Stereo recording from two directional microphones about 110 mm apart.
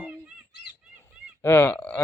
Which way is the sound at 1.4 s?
20° left (ahead or behind).